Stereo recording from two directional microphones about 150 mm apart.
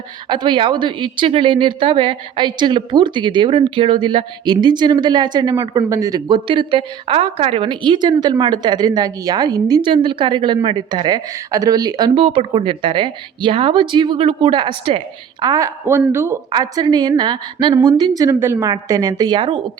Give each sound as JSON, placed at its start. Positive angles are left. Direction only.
{"t": 0.3, "sound": "a woman's voice", "side_deg": -30}